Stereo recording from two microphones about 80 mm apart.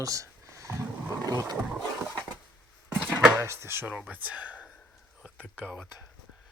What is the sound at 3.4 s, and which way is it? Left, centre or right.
Speech, right.